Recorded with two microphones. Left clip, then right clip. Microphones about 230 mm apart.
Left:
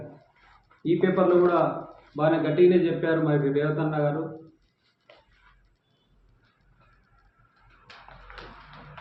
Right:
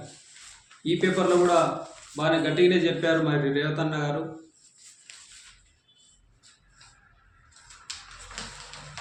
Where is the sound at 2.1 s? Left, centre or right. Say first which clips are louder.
Left 1 dB; centre.